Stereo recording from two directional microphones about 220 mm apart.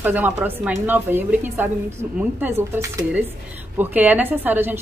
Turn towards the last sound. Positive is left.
turn(degrees=-10)  # may be behind; listen again after turning